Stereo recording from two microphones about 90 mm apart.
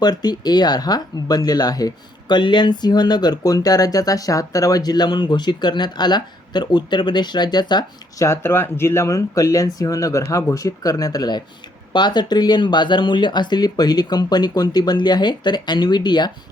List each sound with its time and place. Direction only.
0.0 s speech: 50° left (ahead or behind)
8.2 s speech: 30° left (ahead or behind); by 16.3 s 55° left (ahead or behind)